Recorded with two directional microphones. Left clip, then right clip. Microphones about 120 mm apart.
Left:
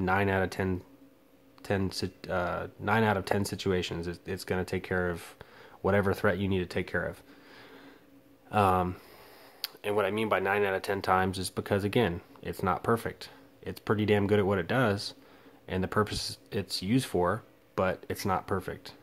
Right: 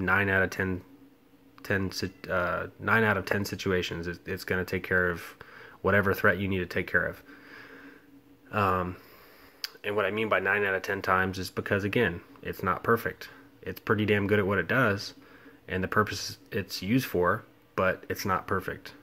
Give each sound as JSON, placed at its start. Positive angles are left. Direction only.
{"t": 0.0, "sound": "speech", "side_deg": 35}
{"t": 8.5, "sound": "speech", "side_deg": 45}